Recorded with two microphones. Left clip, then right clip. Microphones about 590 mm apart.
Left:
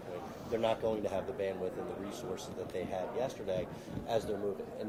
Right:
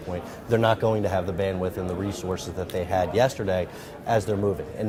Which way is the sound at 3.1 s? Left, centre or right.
Right.